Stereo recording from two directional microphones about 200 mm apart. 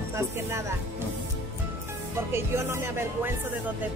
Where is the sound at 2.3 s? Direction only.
15° right (ahead or behind).